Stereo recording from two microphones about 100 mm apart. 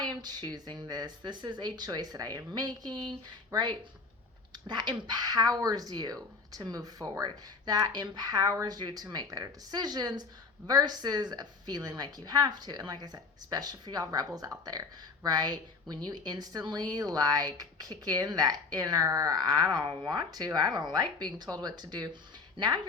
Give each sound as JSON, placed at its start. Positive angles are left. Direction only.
{"t": 0.0, "sound": "speech", "side_deg": -45}